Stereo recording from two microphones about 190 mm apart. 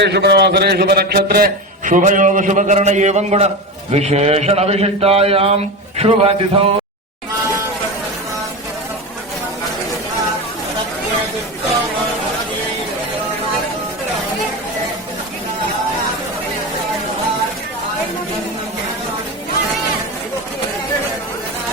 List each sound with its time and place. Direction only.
0.0 s a man's voice: 60° right (ahead or behind); by 6.7 s 30° right (ahead or behind)